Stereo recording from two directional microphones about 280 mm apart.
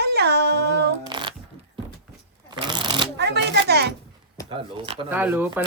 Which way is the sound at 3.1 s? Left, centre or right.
Right.